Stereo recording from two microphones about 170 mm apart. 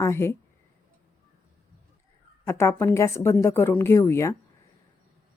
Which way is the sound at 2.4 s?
15° left (ahead or behind).